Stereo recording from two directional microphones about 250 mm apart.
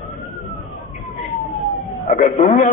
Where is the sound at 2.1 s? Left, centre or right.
Left.